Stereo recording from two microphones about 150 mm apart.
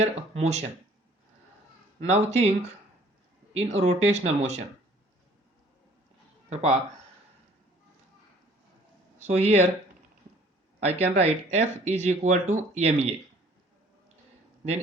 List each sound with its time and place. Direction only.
0.0 s speech: 50° right (ahead or behind)
2.0 s speech: 45° right (ahead or behind)
3.5 s speech: 45° right (ahead or behind)
6.5 s speech: 45° right (ahead or behind)
9.1 s speech: 50° right (ahead or behind)
11.0 s speech: 50° right (ahead or behind)